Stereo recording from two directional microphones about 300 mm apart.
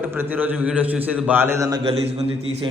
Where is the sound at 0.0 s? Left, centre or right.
Centre.